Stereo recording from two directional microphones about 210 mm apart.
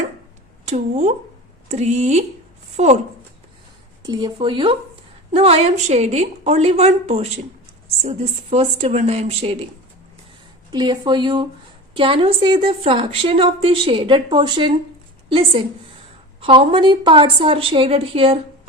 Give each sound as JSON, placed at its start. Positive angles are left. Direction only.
{"t": 0.6, "sound": "speech", "side_deg": -35}
{"t": 4.0, "sound": "a woman's voice", "side_deg": -20}
{"t": 10.7, "sound": "a woman's voice", "side_deg": -20}